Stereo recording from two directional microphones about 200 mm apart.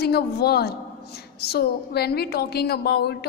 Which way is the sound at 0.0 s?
55° left (ahead or behind).